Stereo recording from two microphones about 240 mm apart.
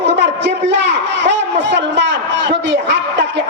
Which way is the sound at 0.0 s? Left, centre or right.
Right.